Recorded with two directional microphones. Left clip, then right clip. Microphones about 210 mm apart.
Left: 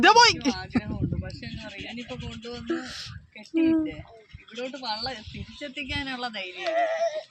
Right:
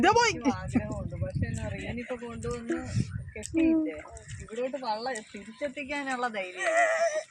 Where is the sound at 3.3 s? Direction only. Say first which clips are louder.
Left 2 dB; 20° right (ahead or behind).